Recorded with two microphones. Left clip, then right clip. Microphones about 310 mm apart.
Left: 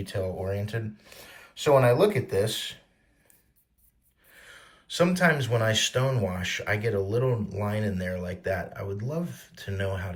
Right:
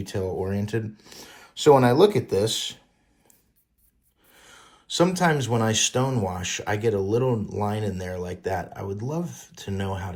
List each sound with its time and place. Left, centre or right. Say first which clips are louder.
0.0 s speech: right 3 dB; right
4.3 s speech: left 1 dB; centre